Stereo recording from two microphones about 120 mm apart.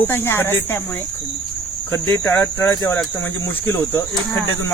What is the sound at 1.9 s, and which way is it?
Cricket, 20° left (ahead or behind).